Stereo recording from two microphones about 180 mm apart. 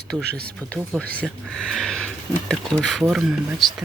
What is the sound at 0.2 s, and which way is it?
Speech, 60° right (ahead or behind).